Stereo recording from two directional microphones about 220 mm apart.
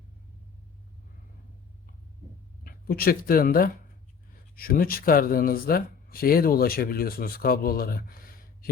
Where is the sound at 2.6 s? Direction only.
45° left (ahead or behind).